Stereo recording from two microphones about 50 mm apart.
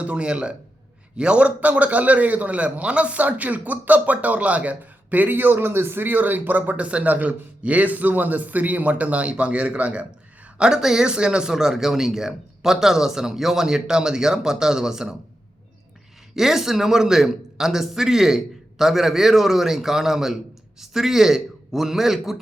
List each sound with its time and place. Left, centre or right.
0.0 s a man's voice: right
10.6 s speech: centre
16.3 s speech: centre